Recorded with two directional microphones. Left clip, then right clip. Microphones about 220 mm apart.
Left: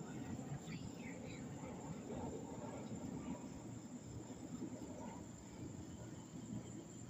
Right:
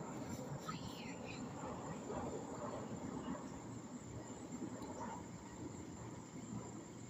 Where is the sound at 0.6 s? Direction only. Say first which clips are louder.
Right 4 dB; 10° left (ahead or behind).